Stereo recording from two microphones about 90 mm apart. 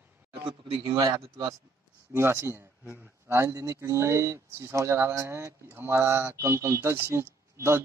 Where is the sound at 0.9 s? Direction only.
45° right (ahead or behind).